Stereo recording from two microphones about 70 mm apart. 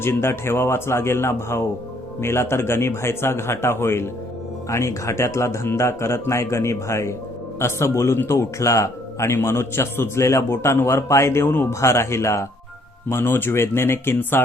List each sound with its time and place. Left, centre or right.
0.0 s a man's voice: left
11.7 s a man's voice: left
13.1 s speech: left